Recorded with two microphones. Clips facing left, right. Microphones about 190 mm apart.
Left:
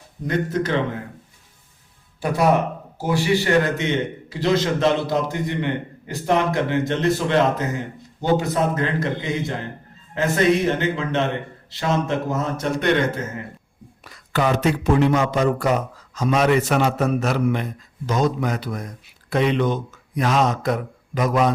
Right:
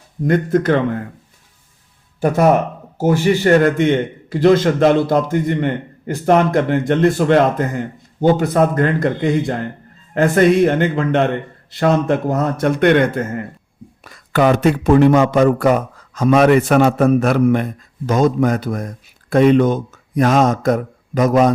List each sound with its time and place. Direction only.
0.3 s a man's voice: 50° right (ahead or behind)
2.2 s a man's voice: 50° right (ahead or behind)